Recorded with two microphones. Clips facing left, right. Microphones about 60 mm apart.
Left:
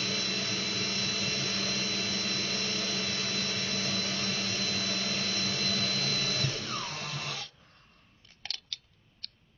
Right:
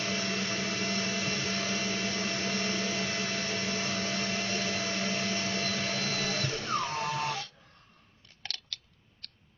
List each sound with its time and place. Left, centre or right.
0.0 s vacuum cleaner: right